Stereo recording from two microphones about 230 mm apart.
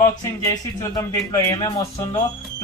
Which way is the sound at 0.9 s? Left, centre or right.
Centre.